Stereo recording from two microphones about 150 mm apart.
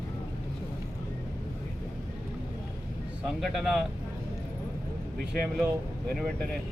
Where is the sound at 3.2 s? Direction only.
5° right (ahead or behind).